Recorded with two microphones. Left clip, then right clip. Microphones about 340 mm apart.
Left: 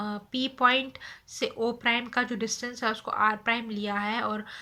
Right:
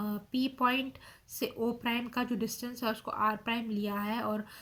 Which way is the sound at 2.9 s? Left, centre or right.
Left.